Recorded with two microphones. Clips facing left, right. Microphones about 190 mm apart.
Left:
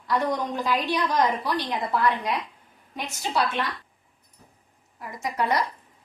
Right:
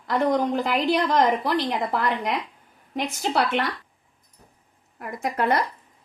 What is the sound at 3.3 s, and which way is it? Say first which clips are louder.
Speech: right 2 dB; 65° right (ahead or behind).